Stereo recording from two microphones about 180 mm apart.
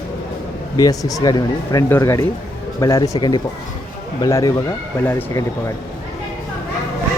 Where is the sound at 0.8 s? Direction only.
20° left (ahead or behind).